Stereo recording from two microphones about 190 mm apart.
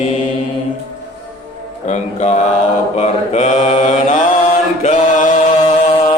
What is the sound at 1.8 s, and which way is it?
Mantra, 35° left (ahead or behind).